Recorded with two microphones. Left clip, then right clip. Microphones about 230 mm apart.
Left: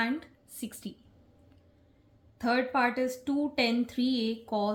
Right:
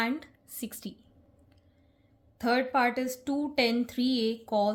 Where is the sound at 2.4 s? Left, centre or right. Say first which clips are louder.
Right 1 dB; right.